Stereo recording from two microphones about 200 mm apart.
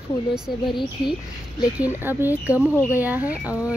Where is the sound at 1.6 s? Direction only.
10° right (ahead or behind).